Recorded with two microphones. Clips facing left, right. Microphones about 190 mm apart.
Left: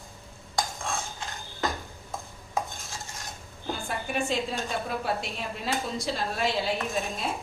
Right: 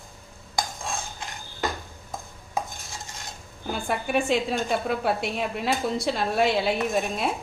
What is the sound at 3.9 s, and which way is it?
A woman's voice, 65° right (ahead or behind).